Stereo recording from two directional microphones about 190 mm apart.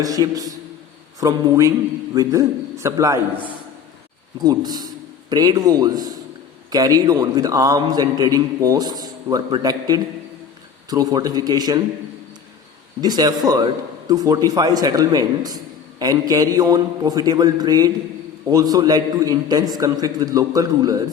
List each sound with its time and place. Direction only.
0.0 s a man's voice: 20° right (ahead or behind)
13.0 s a man's voice: 20° right (ahead or behind)